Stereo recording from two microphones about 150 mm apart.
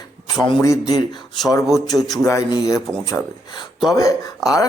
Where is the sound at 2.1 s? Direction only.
20° left (ahead or behind).